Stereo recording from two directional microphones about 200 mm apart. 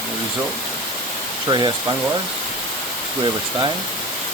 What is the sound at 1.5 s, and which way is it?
Speech, 20° right (ahead or behind).